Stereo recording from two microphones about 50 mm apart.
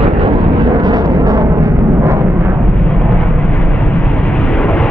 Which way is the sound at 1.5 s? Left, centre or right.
Right.